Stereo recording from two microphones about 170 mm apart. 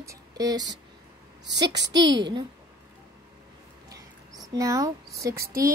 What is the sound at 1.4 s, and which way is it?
Speech, 90° right.